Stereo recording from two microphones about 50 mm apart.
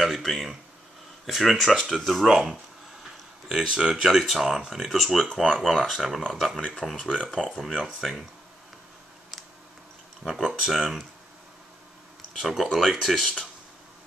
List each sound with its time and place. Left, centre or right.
0.0 s speech: centre
2.2 s speech: centre
6.6 s speech: centre
7.6 s speech: centre
8.0 s speech: centre
10.2 s speech: centre
10.7 s speech: centre
12.4 s speech: centre